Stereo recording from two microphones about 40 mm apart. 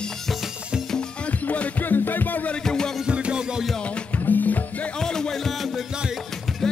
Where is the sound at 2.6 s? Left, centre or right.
Centre.